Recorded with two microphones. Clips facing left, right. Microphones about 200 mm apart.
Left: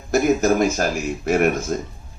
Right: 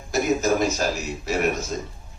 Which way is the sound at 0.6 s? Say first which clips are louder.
Left 4 dB; 55° left (ahead or behind).